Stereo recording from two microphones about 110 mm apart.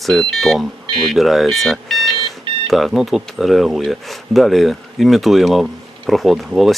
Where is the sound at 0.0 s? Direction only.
5° left (ahead or behind).